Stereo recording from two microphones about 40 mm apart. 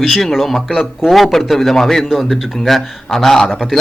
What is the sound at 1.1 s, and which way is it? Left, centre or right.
A man's voice, centre.